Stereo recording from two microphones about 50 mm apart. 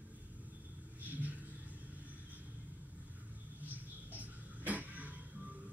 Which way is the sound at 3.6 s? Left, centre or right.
Right.